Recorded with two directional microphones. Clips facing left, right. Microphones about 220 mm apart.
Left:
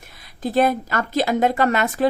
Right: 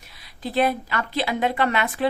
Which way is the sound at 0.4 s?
45° left (ahead or behind).